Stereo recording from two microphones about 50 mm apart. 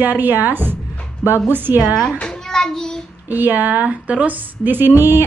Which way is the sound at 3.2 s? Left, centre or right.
Right.